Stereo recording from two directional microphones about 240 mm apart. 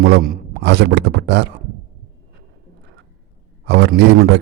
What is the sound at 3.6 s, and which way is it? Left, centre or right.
Speech, right.